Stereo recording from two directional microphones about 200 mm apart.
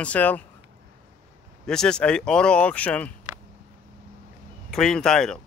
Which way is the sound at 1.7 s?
5° left (ahead or behind).